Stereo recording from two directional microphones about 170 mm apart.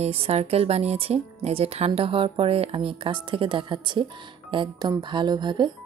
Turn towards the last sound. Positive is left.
turn(degrees=-25)  # may be behind; listen again after turning